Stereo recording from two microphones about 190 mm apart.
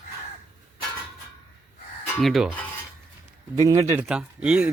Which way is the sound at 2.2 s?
Centre (ahead or behind).